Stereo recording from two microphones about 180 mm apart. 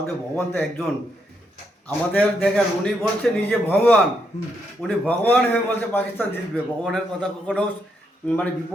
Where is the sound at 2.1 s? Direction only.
5° left (ahead or behind).